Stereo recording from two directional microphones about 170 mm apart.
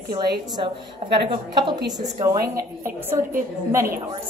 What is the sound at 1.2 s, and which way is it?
Speech, 30° right (ahead or behind).